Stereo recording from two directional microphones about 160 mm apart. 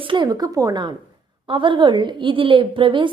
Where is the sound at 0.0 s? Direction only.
30° right (ahead or behind).